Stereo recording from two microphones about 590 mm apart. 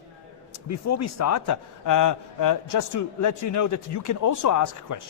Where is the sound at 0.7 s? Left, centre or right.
Left.